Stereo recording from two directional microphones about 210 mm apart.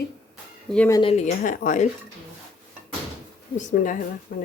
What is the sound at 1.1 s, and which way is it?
Speech, 35° left (ahead or behind).